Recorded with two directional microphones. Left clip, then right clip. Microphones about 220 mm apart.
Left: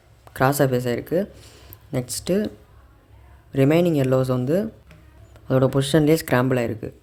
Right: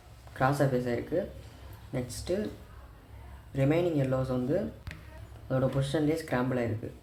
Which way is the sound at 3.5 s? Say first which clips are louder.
Left 9 dB; 50° left (ahead or behind).